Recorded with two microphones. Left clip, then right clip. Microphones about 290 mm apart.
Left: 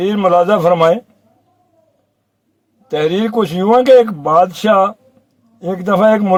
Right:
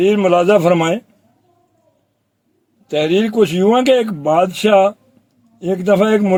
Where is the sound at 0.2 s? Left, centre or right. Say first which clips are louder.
Left 1 dB; centre.